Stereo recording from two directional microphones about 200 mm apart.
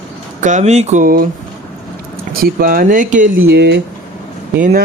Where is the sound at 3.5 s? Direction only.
60° right (ahead or behind).